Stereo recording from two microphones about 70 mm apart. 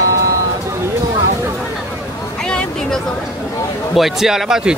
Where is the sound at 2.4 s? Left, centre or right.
Centre.